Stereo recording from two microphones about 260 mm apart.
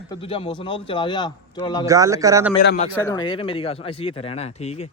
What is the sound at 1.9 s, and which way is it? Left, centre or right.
Speech, centre.